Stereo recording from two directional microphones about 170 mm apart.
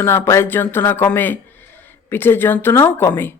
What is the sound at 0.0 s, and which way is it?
Speech, 15° left (ahead or behind).